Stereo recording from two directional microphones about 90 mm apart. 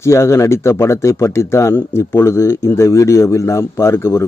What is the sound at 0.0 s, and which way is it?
A man's voice, 35° left (ahead or behind).